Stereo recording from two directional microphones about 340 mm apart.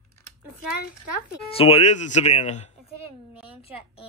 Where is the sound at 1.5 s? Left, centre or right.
Centre.